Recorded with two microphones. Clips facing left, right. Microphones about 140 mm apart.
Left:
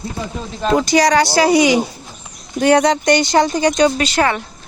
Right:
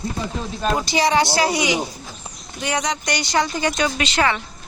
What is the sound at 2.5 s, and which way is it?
Speech, 60° left (ahead or behind).